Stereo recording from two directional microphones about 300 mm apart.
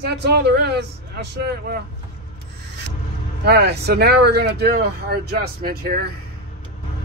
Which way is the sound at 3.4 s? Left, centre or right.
Right.